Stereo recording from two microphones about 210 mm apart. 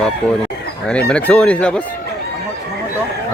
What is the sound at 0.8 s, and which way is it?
Speech, 5° left (ahead or behind).